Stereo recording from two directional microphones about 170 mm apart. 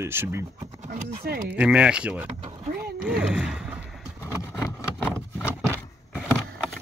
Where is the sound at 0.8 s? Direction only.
60° right (ahead or behind).